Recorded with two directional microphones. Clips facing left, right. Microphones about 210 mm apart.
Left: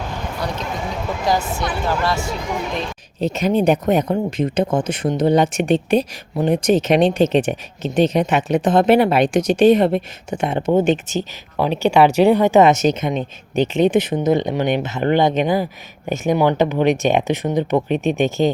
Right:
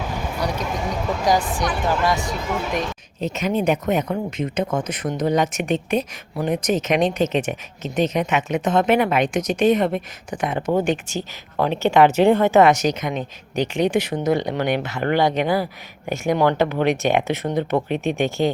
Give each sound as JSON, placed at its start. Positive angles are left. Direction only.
{"t": 0.3, "sound": "speech", "side_deg": -10}
{"t": 0.7, "sound": "speech", "side_deg": 5}
{"t": 2.0, "sound": "speech", "side_deg": -15}
{"t": 3.2, "sound": "speech", "side_deg": 35}